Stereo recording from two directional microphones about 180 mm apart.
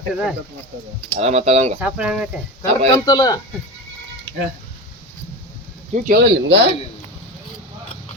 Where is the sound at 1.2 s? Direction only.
35° right (ahead or behind).